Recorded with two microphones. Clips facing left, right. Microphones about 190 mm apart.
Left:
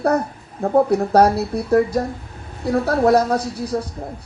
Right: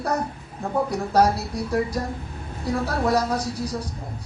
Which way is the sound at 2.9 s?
60° left (ahead or behind).